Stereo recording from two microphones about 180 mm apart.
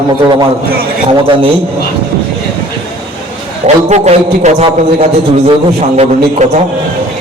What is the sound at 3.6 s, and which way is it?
A man's voice, 35° right (ahead or behind).